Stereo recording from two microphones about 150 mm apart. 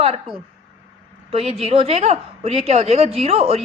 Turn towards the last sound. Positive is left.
turn(degrees=-45)  # may be behind; listen again after turning